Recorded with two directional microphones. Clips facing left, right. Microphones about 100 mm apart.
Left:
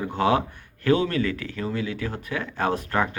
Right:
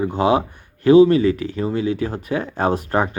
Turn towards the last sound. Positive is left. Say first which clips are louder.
# right 5 dB
turn(degrees=-25)  # may be behind; listen again after turning